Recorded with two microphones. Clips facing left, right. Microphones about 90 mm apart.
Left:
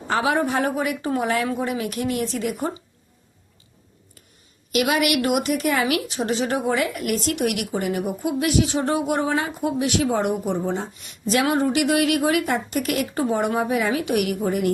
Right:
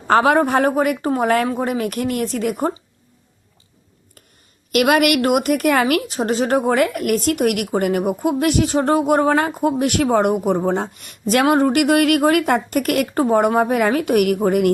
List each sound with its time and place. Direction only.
0.1 s a woman's voice: 50° right (ahead or behind)
4.7 s a woman's voice: 60° right (ahead or behind)